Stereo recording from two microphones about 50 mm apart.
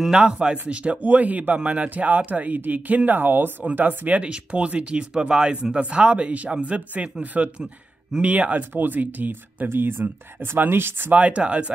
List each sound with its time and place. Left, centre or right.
0.1 s a man's voice: centre; by 11.1 s right
11.1 s speech: right